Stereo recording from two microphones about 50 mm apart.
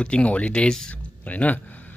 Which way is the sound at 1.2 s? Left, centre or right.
Left.